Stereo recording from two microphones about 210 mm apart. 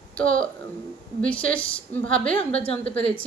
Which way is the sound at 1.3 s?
5° left (ahead or behind).